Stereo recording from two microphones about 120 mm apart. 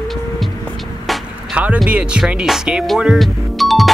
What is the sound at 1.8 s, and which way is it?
Music, 10° right (ahead or behind).